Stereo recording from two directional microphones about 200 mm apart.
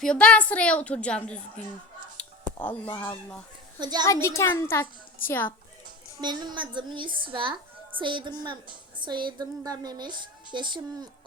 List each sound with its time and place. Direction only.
0.0 s a woman's voice: 5° left (ahead or behind)
2.2 s a sound: 5° left (ahead or behind)
2.6 s a child's voice: 10° left (ahead or behind)
3.8 s a woman's voice: 20° right (ahead or behind)
4.0 s a child's voice: 15° left (ahead or behind)
6.1 s a woman's voice: 20° right (ahead or behind)